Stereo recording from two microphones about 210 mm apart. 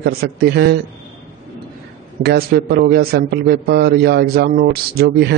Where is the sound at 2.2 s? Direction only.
45° right (ahead or behind).